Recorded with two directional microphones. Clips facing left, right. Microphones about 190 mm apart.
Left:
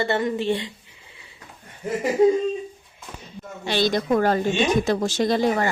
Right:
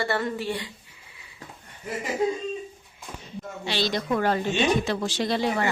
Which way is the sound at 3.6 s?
50° left (ahead or behind).